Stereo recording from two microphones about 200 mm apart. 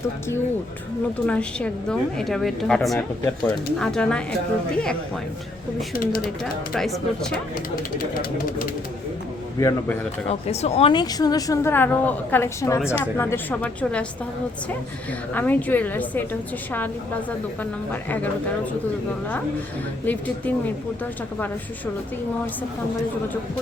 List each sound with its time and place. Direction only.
1.3 s a woman's voice: 5° left (ahead or behind)
5.9 s speech: 45° left (ahead or behind)
6.7 s a woman's voice: centre (ahead or behind)
9.6 s speech: 10° left (ahead or behind)
10.2 s a woman's voice: 30° left (ahead or behind); by 14.0 s 10° left (ahead or behind)
15.3 s speech: 10° left (ahead or behind)
18.1 s speech: 5° left (ahead or behind)
20.1 s speech: 10° left (ahead or behind)